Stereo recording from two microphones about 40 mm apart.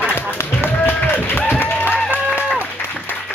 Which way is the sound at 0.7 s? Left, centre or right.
Left.